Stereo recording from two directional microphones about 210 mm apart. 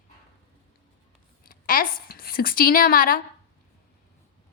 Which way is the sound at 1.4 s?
40° left (ahead or behind).